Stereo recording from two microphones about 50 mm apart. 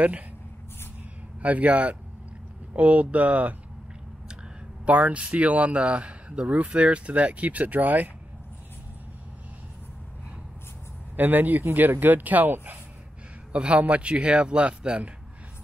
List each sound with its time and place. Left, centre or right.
1.4 s speech: right
4.8 s speech: right
11.1 s speech: right
13.5 s speech: right